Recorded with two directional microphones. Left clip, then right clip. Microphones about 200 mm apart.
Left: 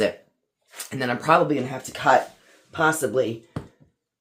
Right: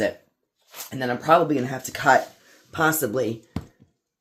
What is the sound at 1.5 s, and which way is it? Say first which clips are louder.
Speech: even; 25° right (ahead or behind).